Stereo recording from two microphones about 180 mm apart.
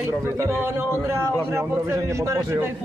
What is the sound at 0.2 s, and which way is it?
A man's voice, 15° right (ahead or behind).